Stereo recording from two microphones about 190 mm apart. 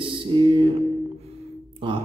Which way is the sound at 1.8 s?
25° right (ahead or behind).